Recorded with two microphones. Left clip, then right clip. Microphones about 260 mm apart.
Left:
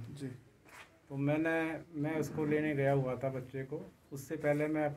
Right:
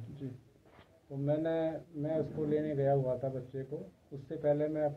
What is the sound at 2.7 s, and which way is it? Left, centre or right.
A man's voice, centre.